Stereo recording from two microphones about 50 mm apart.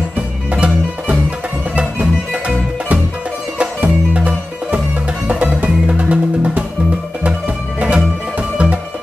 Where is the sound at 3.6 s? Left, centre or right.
Right.